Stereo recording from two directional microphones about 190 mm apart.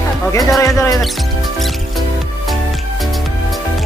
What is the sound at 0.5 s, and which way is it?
Music, 15° left (ahead or behind).